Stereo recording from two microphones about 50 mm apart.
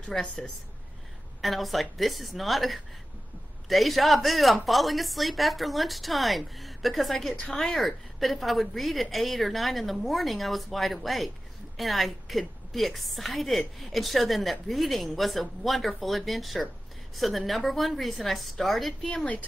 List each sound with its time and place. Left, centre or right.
0.1 s a woman's voice: centre
1.4 s a woman's voice: centre